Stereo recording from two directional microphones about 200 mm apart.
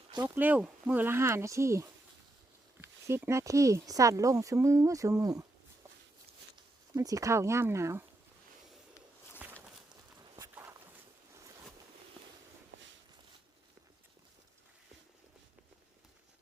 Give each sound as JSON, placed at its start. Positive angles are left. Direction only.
{"t": 0.3, "sound": "speech", "side_deg": -10}
{"t": 6.9, "sound": "speech", "side_deg": -15}
{"t": 9.4, "sound": "walk", "side_deg": -10}
{"t": 12.7, "sound": "walk", "side_deg": -65}